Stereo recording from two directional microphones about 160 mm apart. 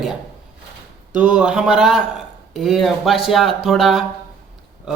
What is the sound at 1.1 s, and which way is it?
A man's voice, 5° right (ahead or behind).